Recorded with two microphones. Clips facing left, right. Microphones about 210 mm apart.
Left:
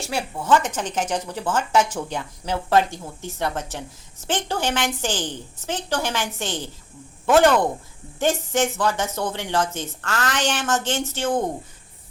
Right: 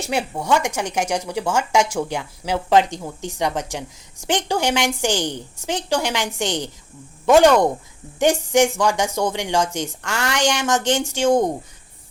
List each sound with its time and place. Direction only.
0.1 s speech: 20° right (ahead or behind)